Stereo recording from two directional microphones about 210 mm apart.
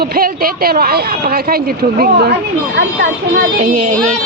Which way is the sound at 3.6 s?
40° right (ahead or behind).